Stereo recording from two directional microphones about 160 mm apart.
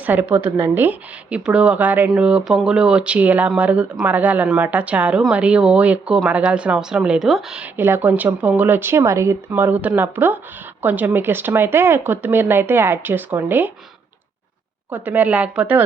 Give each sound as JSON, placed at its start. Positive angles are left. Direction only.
{"t": 0.0, "sound": "a woman's voice", "side_deg": -10}
{"t": 14.8, "sound": "a woman's voice", "side_deg": -10}